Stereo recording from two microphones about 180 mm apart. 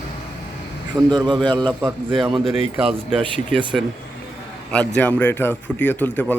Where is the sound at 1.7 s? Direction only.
10° right (ahead or behind).